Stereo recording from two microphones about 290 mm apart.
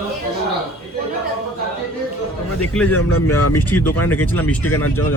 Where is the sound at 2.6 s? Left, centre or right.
Centre.